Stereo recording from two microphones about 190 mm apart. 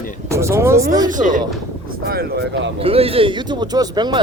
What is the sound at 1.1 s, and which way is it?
Speech, 45° right (ahead or behind).